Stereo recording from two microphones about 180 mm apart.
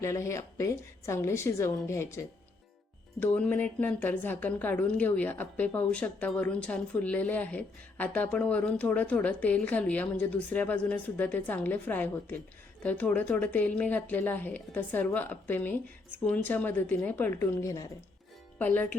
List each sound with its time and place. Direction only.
0.0 s a woman's voice: 15° left (ahead or behind)
3.3 s a woman's voice: 10° left (ahead or behind)